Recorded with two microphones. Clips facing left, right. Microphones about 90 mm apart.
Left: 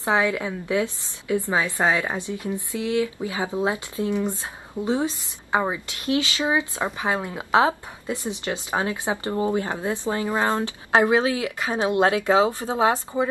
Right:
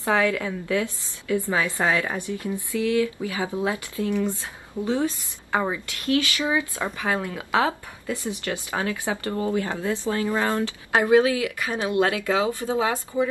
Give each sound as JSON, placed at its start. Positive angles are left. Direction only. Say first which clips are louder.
{"t": 0.0, "sound": "speech", "louder": "even", "side_deg": 20}